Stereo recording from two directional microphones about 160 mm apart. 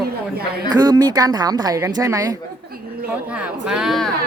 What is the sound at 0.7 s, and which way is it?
A woman's voice, 25° right (ahead or behind).